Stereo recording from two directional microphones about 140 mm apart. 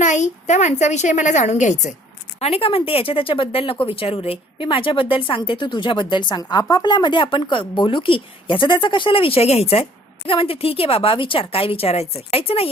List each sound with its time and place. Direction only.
0.0 s a woman's voice: 60° left (ahead or behind)
2.4 s speech: 45° left (ahead or behind)